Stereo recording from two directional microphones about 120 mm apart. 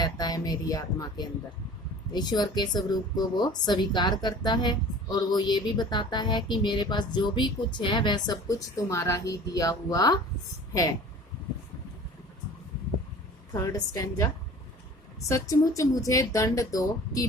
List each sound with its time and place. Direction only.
0.0 s a woman's voice: 35° left (ahead or behind)
8.3 s speech: 30° left (ahead or behind)
13.5 s a woman's voice: 35° left (ahead or behind)
15.3 s speech: 25° left (ahead or behind)